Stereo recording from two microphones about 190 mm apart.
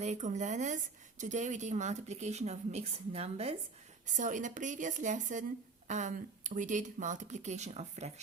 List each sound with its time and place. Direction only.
0.0 s a woman's voice: 40° right (ahead or behind)